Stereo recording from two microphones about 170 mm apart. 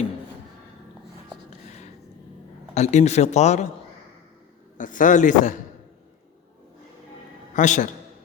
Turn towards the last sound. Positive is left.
turn(degrees=45)  # may be behind; listen again after turning